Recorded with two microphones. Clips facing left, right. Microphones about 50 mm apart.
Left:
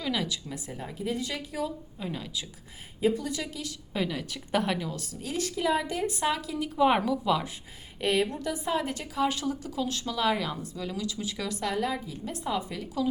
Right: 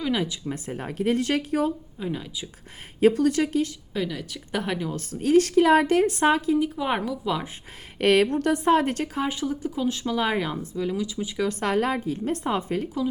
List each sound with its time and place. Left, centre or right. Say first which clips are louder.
0.0 s speech: right 5 dB; right
0.5 s a woman's voice: right 6 dB; right
2.0 s speech: right 4 dB; centre
3.0 s a woman's voice: right 8 dB; right
3.9 s a woman's voice: right 1 dB; centre
4.9 s a woman's voice: right 14 dB; right
6.7 s a woman's voice: left 3 dB; centre
7.9 s a woman's voice: right 7 dB; right
9.1 s speech: right 1 dB; right
11.4 s a woman's voice: right 6 dB; right